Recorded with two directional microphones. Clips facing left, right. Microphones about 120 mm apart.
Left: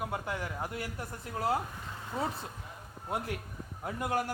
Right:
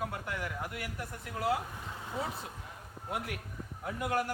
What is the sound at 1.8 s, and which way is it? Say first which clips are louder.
Vehicle: left 2 dB; 10° right (ahead or behind).